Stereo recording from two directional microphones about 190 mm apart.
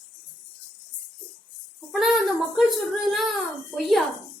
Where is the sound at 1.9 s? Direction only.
Centre (ahead or behind).